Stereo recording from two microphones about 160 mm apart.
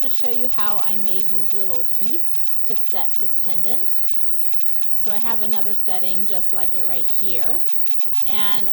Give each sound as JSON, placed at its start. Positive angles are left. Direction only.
{"t": 0.0, "sound": "a woman's voice", "side_deg": 30}
{"t": 4.9, "sound": "a woman's voice", "side_deg": 35}